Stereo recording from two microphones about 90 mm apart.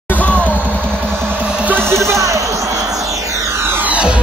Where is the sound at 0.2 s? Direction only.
15° left (ahead or behind).